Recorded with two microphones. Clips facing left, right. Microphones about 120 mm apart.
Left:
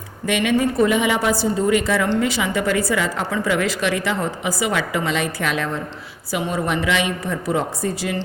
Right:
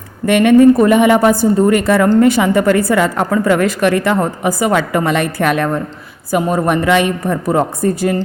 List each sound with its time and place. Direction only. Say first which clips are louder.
0.3 s a woman's voice: right 12 dB; 50° right (ahead or behind)